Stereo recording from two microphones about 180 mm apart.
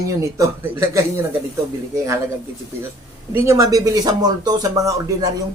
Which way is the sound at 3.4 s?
15° right (ahead or behind).